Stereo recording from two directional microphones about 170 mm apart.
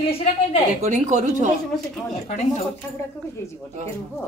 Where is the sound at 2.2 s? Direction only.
45° left (ahead or behind).